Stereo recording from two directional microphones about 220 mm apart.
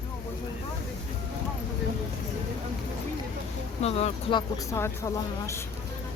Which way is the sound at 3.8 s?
30° left (ahead or behind).